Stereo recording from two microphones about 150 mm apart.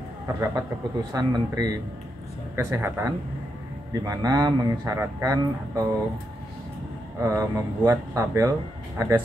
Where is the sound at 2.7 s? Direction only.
15° right (ahead or behind).